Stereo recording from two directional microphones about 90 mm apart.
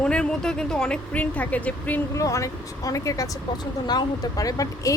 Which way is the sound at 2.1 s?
35° left (ahead or behind).